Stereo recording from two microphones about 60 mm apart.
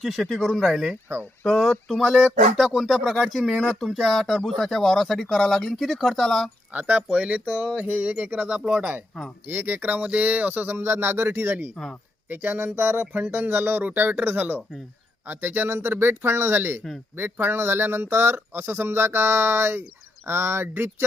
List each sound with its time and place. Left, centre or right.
0.0 s speech: centre
6.7 s speech: right
8.4 s speech: centre; by 11.5 s right
11.8 s speech: centre
12.3 s speech: right